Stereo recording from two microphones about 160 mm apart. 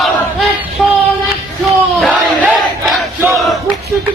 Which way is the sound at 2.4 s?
Centre (ahead or behind).